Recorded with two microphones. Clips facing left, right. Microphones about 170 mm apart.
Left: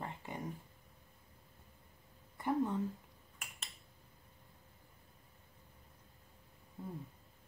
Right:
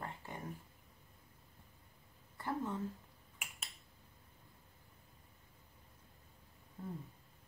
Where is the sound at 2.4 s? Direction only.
15° left (ahead or behind).